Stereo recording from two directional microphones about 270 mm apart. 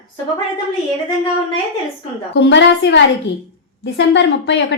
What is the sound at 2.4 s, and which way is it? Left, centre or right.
A woman's voice, left.